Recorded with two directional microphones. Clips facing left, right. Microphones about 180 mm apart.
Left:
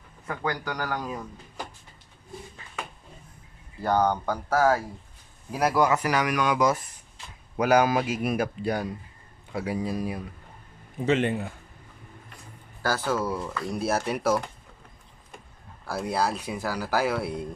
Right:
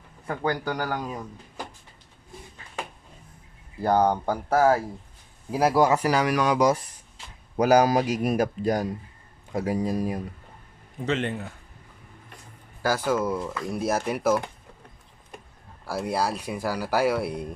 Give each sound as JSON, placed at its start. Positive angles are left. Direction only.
{"t": 0.3, "sound": "speech", "side_deg": -30}
{"t": 3.8, "sound": "speech", "side_deg": -30}
{"t": 11.0, "sound": "a man's voice", "side_deg": 10}
{"t": 12.8, "sound": "speech", "side_deg": -10}
{"t": 13.1, "sound": "speech", "side_deg": 5}
{"t": 13.7, "sound": "speech", "side_deg": -10}
{"t": 15.9, "sound": "speech", "side_deg": -10}